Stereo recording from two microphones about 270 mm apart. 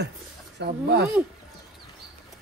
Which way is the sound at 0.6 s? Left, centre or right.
Right.